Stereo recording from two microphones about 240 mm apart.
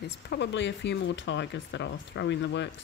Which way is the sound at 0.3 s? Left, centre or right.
Left.